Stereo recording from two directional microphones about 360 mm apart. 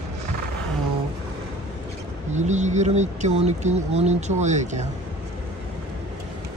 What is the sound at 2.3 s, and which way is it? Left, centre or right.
Speech, centre.